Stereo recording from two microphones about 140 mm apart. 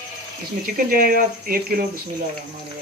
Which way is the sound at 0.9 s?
90° right.